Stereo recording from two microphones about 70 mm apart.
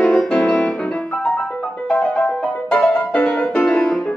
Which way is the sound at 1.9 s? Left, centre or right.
Left.